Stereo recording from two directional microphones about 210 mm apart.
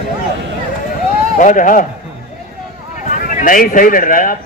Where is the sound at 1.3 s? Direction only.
40° left (ahead or behind).